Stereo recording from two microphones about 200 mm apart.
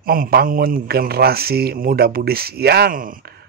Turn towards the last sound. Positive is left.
turn(degrees=-45)  # may be behind; listen again after turning